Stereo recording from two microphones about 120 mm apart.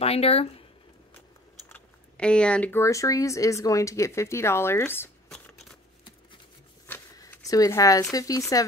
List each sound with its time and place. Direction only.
0.0 s speech: 55° left (ahead or behind)
1.7 s a sound: 10° left (ahead or behind)
2.7 s speech: 25° left (ahead or behind)
7.2 s speech: 30° left (ahead or behind)